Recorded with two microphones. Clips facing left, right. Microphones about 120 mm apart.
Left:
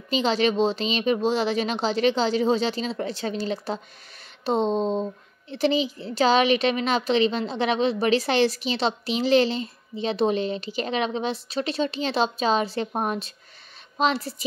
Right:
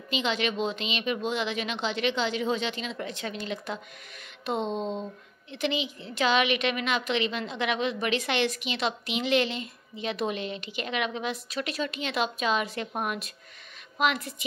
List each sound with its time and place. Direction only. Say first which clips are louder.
0.1 s a woman's voice: left 7 dB; 35° left (ahead or behind)